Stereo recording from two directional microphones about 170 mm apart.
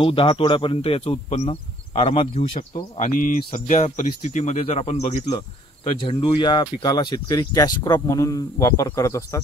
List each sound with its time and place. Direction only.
0.0 s speech: 30° left (ahead or behind)
2.3 s speech: 50° left (ahead or behind); by 9.4 s 20° left (ahead or behind)